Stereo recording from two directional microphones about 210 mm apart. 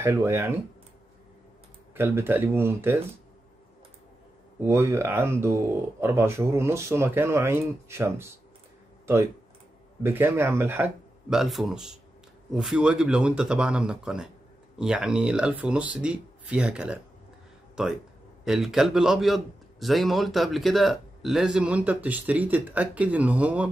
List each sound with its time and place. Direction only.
0.0 s speech: 10° right (ahead or behind)
2.0 s speech: 10° right (ahead or behind)
4.6 s speech: 10° right (ahead or behind)
10.0 s a man's voice: 10° right (ahead or behind)